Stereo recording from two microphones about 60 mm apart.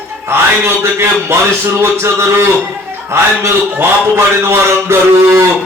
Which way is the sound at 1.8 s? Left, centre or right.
Right.